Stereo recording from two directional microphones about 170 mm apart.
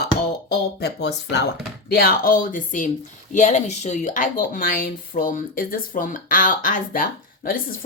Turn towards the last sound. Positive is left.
turn(degrees=55)  # may be behind; listen again after turning